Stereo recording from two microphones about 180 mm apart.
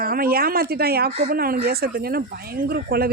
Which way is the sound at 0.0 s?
55° right (ahead or behind).